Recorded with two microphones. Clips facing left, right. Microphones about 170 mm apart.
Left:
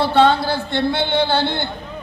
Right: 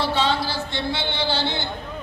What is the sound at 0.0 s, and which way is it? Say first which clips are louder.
A man's voice: left 7 dB; 55° left (ahead or behind).